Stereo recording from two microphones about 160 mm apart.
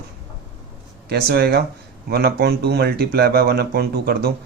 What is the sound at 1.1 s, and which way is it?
Speech, 80° right.